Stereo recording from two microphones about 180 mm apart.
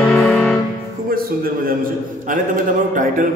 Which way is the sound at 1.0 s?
55° right (ahead or behind).